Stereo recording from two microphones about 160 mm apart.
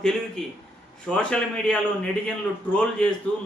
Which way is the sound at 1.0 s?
5° left (ahead or behind).